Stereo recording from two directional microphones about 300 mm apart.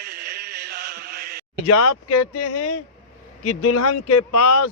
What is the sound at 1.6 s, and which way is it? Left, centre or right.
Speech, left.